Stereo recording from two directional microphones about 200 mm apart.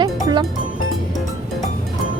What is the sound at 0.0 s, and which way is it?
Music, 20° right (ahead or behind).